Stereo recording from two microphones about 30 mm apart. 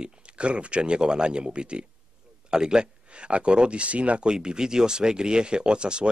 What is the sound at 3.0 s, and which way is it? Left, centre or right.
Speech, right.